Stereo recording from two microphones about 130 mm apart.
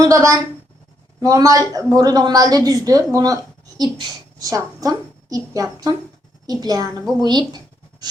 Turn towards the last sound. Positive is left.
turn(degrees=-35)  # may be behind; listen again after turning